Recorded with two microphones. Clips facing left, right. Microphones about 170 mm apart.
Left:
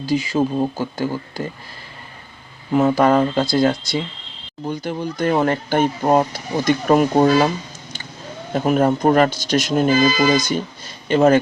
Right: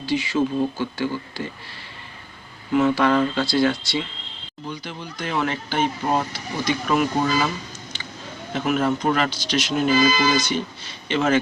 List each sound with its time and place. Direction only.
0.0 s speech: 40° left (ahead or behind)
2.7 s speech: 45° left (ahead or behind)
7.3 s speech: 55° left (ahead or behind)
8.5 s speech: 35° left (ahead or behind)